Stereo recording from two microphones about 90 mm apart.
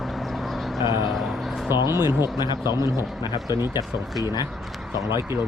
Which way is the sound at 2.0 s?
50° left (ahead or behind).